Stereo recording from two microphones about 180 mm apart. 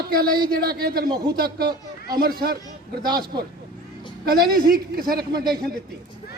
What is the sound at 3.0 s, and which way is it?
Speech, 25° right (ahead or behind).